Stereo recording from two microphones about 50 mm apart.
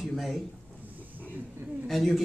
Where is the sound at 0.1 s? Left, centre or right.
Centre.